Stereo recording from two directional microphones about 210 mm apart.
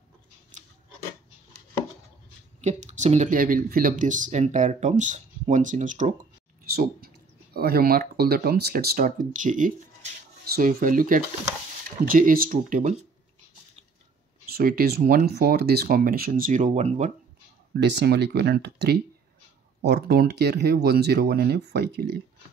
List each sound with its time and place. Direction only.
2.6 s speech: 35° right (ahead or behind)
14.5 s speech: 45° right (ahead or behind)
17.7 s speech: 55° right (ahead or behind)